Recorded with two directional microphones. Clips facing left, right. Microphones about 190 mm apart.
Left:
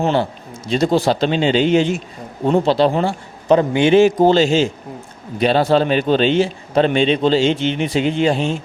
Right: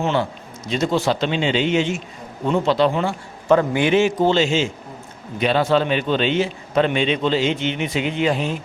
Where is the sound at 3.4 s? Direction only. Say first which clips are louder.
Left 3 dB; 20° left (ahead or behind).